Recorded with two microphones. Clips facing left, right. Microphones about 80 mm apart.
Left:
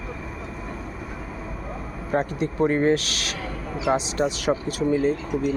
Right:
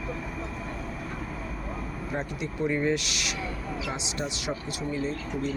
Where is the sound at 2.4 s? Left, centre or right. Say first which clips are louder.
Left 5 dB; left.